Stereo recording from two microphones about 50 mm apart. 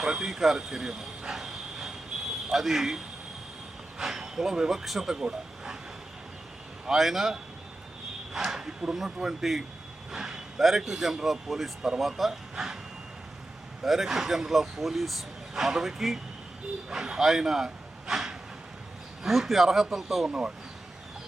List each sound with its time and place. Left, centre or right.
0.0 s a man's voice: centre
6.8 s a man's voice: centre
13.8 s speech: centre
20.2 s a man's voice: centre